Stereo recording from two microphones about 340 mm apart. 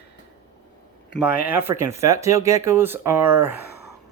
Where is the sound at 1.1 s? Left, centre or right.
Centre.